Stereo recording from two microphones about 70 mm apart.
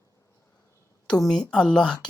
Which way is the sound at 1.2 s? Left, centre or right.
Centre.